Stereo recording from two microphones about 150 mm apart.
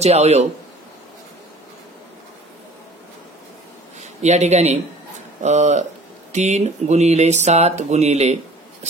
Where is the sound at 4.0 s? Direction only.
50° right (ahead or behind).